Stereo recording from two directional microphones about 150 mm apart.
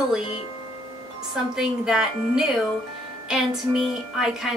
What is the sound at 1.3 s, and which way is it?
Speech, 5° right (ahead or behind).